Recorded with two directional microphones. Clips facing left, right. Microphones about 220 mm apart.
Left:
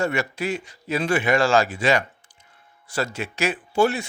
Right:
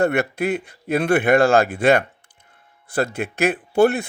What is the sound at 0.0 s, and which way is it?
Speech, 60° right (ahead or behind).